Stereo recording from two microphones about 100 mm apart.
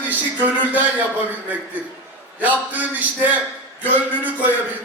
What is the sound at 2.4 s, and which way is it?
A man's voice, 15° right (ahead or behind).